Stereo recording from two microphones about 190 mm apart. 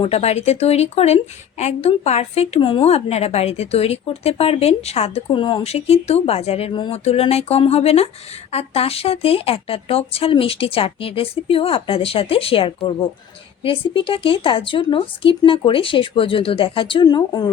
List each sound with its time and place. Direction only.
0.0 s a woman's voice: 30° left (ahead or behind)